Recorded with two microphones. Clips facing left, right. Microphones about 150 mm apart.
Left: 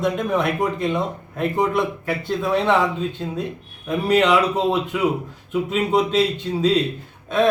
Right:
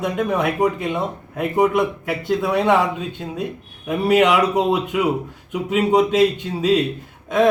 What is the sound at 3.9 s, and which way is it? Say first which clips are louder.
Speech: right 2 dB; 10° right (ahead or behind).